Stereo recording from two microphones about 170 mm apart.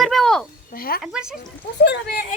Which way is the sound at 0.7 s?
60° left (ahead or behind).